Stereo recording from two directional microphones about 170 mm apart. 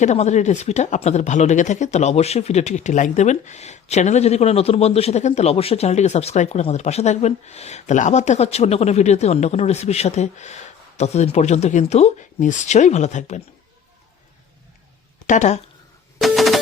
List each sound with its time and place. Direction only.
0.0 s speech: 40° left (ahead or behind)
15.3 s speech: 45° left (ahead or behind)
16.2 s a sound: centre (ahead or behind)